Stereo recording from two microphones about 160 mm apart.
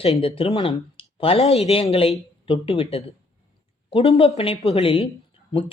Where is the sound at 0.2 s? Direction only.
35° left (ahead or behind).